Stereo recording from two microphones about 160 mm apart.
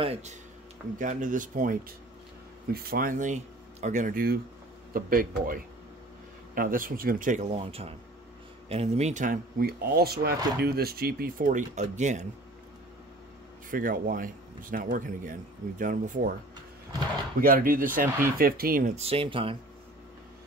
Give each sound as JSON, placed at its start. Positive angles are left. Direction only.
{"t": 0.0, "sound": "speech", "side_deg": -40}
{"t": 0.9, "sound": "speech", "side_deg": -55}
{"t": 2.7, "sound": "speech", "side_deg": -70}
{"t": 7.5, "sound": "speech", "side_deg": -40}
{"t": 13.7, "sound": "speech", "side_deg": -60}
{"t": 17.4, "sound": "speech", "side_deg": -65}
{"t": 18.9, "sound": "speech", "side_deg": -35}